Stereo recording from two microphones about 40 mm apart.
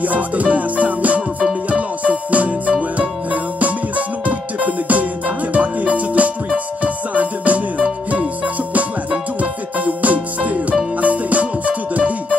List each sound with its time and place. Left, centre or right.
0.0 s music: right